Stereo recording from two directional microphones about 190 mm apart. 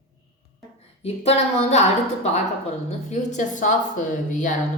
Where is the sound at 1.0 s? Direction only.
35° left (ahead or behind).